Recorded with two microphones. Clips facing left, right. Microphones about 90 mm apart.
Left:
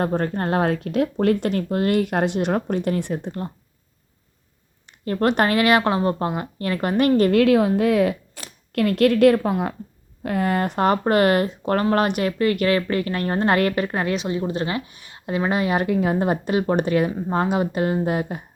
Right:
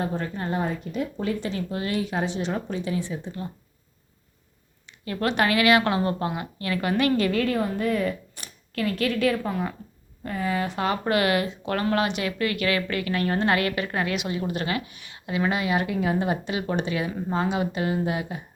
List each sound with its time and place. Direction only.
0.0 s speech: 55° left (ahead or behind)
5.0 s speech: 45° left (ahead or behind)
5.8 s speech: 30° left (ahead or behind)
7.2 s a woman's voice: 55° left (ahead or behind)